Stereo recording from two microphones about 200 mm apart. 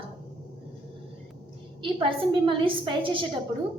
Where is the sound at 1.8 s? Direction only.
25° right (ahead or behind).